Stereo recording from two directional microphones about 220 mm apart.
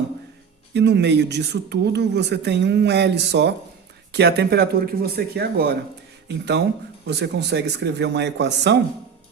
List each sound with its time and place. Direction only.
0.7 s speech: 50° right (ahead or behind)